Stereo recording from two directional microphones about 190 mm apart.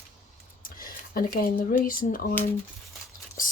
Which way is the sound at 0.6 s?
45° left (ahead or behind).